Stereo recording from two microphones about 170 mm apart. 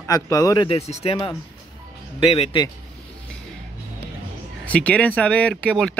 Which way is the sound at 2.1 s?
35° left (ahead or behind).